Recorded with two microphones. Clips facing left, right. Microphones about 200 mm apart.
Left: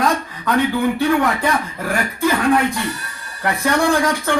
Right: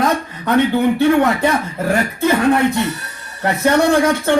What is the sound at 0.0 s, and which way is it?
Speech, 25° right (ahead or behind).